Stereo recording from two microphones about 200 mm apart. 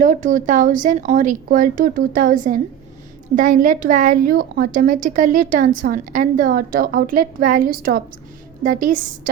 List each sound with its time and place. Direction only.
0.0 s a woman's voice: 40° right (ahead or behind)